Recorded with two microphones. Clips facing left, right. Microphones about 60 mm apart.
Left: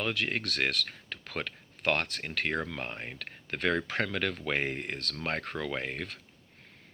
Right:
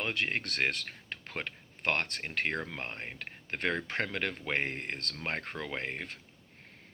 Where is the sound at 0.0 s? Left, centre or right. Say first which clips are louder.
Left 1 dB; centre.